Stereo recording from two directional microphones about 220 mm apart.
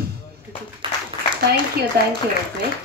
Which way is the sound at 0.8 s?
25° right (ahead or behind).